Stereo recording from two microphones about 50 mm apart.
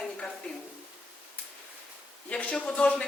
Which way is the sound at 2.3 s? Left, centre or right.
Left.